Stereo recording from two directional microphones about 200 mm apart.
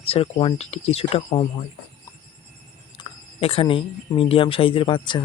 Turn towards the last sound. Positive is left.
turn(degrees=25)  # may be behind; listen again after turning